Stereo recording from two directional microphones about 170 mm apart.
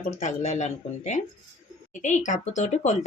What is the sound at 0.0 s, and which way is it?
Speech, 45° left (ahead or behind).